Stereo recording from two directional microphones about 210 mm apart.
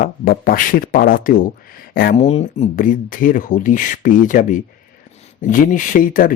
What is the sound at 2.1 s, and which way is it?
Speech, 30° left (ahead or behind).